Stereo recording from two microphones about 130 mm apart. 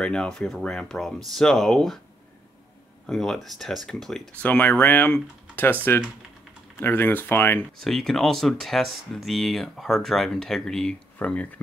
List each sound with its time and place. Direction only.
0.0 s speech: 5° left (ahead or behind)
3.1 s speech: centre (ahead or behind)
6.8 s speech: 15° left (ahead or behind)
7.8 s speech: 5° left (ahead or behind)